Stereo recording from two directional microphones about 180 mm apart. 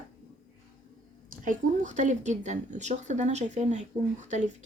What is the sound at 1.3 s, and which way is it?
A woman's voice, 45° right (ahead or behind).